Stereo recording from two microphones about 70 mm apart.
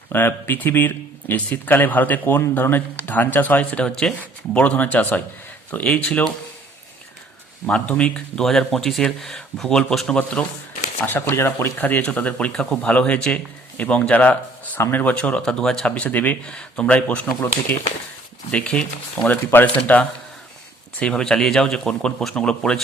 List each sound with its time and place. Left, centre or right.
0.1 s speech: left; by 4.1 s centre
4.5 s speech: left
7.7 s speech: centre
10.2 s speech: centre
11.0 s speech: left
14.8 s speech: left; by 15.9 s centre
16.0 s speech: left
17.7 s speech: left
18.5 s speech: centre